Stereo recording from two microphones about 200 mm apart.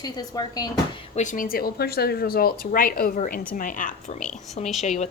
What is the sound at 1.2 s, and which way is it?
A woman's voice, 40° left (ahead or behind).